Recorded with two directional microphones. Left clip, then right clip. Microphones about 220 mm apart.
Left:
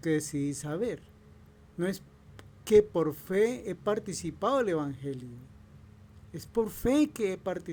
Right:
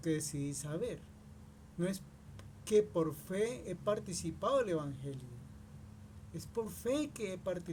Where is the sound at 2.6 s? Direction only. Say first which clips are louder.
Left 8 dB; 45° left (ahead or behind).